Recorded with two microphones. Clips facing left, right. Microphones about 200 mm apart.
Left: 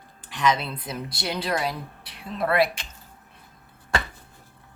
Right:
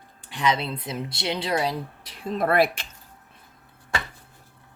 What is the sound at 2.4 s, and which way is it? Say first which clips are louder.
Speech: right 2 dB; 50° right (ahead or behind).